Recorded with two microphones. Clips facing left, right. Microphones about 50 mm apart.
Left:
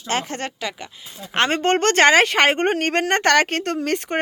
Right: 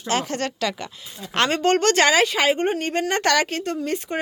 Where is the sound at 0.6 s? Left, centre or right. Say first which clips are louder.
Right 3 dB; centre.